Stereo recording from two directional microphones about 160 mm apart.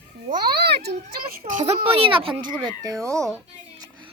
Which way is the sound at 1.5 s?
40° right (ahead or behind).